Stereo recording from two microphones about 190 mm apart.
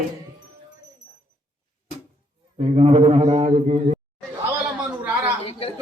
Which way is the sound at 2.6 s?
35° right (ahead or behind).